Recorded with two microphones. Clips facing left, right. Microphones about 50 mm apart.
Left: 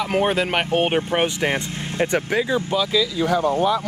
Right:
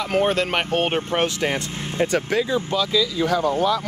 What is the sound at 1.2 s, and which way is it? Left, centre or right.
Speech, left.